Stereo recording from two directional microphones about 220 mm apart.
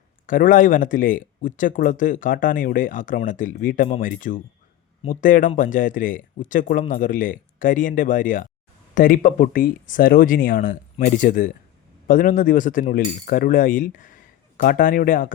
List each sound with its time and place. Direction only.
0.3 s speech: 40° left (ahead or behind)